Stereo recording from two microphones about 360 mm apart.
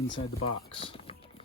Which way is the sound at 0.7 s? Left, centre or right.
Centre.